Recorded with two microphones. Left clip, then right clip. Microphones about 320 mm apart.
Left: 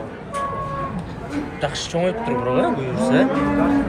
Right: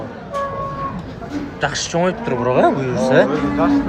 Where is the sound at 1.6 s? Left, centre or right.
Centre.